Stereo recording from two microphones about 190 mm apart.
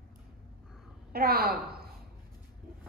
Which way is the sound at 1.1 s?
50° right (ahead or behind).